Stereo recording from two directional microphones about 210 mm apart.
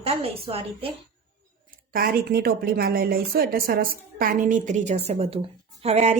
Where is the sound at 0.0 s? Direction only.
25° right (ahead or behind).